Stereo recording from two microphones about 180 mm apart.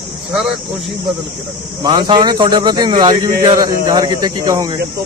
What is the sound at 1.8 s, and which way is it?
Speech, 25° right (ahead or behind).